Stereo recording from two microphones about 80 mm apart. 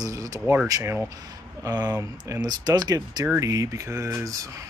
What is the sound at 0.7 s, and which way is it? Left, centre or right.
Speech, right.